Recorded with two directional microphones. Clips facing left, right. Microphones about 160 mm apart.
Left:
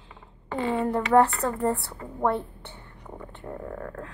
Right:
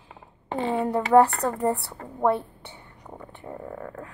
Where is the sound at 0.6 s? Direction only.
25° right (ahead or behind).